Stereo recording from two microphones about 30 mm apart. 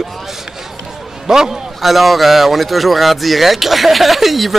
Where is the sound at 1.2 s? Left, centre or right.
Centre.